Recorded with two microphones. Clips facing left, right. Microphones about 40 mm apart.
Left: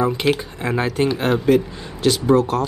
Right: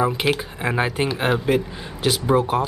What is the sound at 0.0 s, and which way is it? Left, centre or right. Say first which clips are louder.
Speech: left 2 dB; centre.